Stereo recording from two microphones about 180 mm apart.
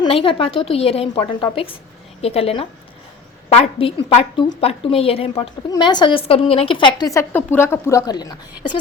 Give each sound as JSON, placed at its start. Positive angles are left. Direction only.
{"t": 0.0, "sound": "a woman's voice", "side_deg": 30}